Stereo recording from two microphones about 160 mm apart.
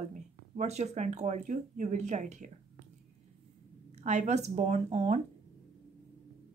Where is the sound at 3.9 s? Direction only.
45° right (ahead or behind).